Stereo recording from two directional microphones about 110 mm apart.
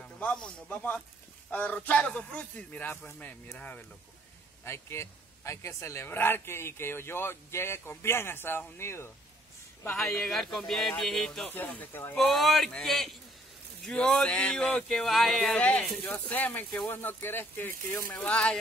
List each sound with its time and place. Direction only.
0.0 s a man's voice: 10° left (ahead or behind)
9.9 s speech: 5° left (ahead or behind)
11.5 s a man's voice: 15° left (ahead or behind)
12.2 s a man's voice: centre (ahead or behind); by 18.1 s 20° left (ahead or behind)
18.1 s a man's voice: 10° left (ahead or behind)